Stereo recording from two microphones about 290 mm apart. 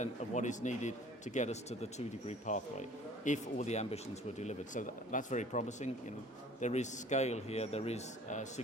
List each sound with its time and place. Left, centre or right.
0.0 s speech: left